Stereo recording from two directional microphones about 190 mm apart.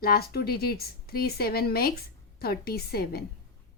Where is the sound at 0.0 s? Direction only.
55° left (ahead or behind).